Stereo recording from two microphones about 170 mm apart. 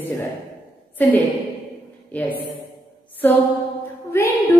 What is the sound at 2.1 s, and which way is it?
Speech, 10° left (ahead or behind).